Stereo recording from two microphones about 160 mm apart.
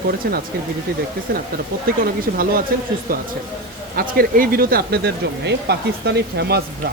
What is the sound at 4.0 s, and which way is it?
Speech, 65° right (ahead or behind).